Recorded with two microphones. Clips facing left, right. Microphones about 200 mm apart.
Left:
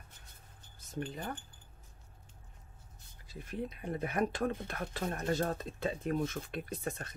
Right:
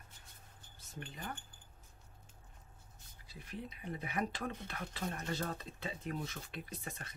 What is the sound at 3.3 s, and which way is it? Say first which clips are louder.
Speech: left 7 dB; 50° left (ahead or behind).